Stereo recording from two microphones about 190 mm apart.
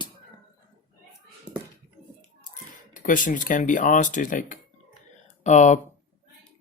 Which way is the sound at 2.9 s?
45° left (ahead or behind).